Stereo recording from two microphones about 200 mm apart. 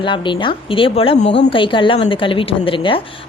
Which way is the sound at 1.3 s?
60° left (ahead or behind).